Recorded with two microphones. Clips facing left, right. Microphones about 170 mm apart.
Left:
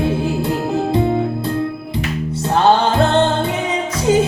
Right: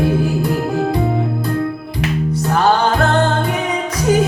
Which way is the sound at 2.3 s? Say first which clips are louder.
Left 2 dB; 25° left (ahead or behind).